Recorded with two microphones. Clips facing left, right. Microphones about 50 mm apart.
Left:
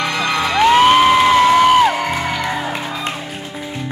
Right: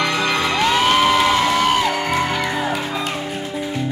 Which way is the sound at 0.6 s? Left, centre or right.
Left.